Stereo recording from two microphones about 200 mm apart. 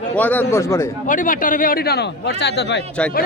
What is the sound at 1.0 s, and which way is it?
Speech, 40° left (ahead or behind).